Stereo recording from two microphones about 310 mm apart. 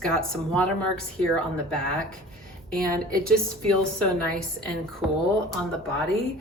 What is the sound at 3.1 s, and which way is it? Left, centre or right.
Speech, right.